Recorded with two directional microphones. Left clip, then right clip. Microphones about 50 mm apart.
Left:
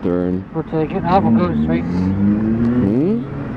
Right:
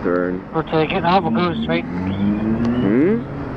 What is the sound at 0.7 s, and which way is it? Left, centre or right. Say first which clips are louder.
Speech: even; right.